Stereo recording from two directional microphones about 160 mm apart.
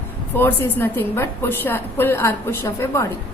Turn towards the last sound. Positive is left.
turn(degrees=15)  # may be behind; listen again after turning